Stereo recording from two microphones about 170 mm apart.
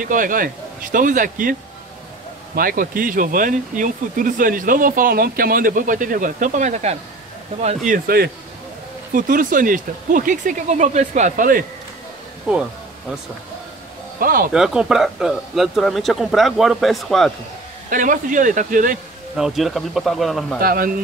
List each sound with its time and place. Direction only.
0.0 s speech: 50° right (ahead or behind)
14.5 s speech: 5° right (ahead or behind)
17.8 s speech: 50° right (ahead or behind)
19.3 s speech: centre (ahead or behind)
20.6 s speech: 60° right (ahead or behind)